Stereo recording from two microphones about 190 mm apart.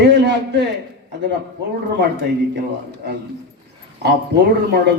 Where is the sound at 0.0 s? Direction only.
65° right (ahead or behind).